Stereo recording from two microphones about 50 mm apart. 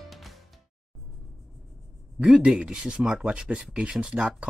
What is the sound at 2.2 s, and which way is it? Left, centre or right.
Speech, centre.